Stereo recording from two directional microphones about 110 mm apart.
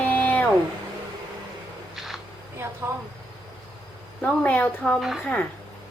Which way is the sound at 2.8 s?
20° right (ahead or behind).